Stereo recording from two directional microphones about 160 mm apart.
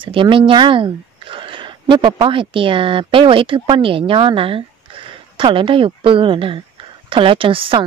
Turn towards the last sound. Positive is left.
turn(degrees=-35)  # may be behind; listen again after turning